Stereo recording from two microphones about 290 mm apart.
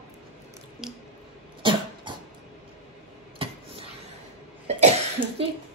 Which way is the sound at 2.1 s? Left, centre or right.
Centre.